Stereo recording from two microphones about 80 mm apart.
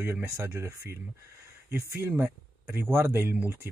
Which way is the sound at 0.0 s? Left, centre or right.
Right.